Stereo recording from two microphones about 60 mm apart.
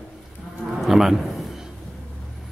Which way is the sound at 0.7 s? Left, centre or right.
Centre.